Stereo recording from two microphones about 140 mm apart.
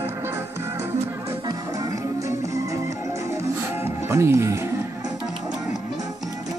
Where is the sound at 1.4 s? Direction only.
25° right (ahead or behind).